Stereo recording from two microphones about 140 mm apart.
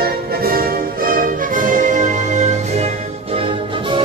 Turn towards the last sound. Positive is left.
turn(degrees=-40)  # may be behind; listen again after turning